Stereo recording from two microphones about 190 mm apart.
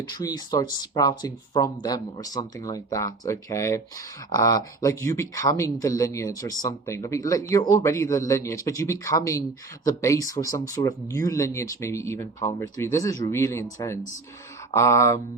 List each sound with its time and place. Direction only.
0.1 s speech: 20° left (ahead or behind)